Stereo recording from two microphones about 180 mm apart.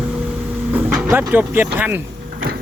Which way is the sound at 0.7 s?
10° right (ahead or behind).